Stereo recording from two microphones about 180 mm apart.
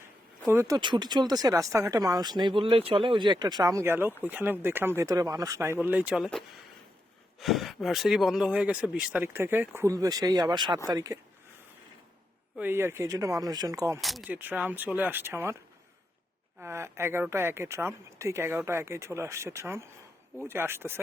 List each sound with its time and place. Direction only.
0.4 s speech: 15° right (ahead or behind)
0.8 s speech: 25° right (ahead or behind)
12.5 s speech: 10° right (ahead or behind)
14.0 s speech: centre (ahead or behind)
16.6 s speech: 15° right (ahead or behind)